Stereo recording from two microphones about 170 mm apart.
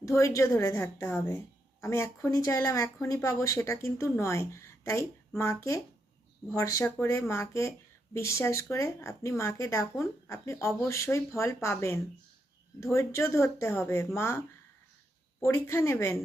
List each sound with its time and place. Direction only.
0.0 s speech: 15° left (ahead or behind)